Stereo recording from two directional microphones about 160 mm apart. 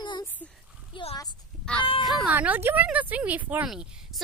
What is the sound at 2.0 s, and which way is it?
Speech, centre (ahead or behind).